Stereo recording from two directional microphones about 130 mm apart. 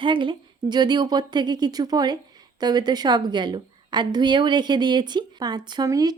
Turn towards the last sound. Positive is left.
turn(degrees=-30)  # may be behind; listen again after turning